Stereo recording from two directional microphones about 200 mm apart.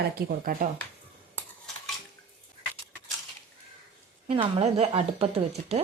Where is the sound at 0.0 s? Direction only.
50° right (ahead or behind).